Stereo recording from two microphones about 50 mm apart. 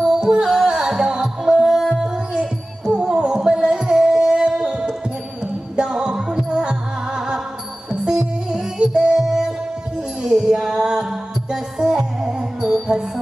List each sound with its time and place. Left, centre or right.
0.0 s music: centre
2.9 s music: right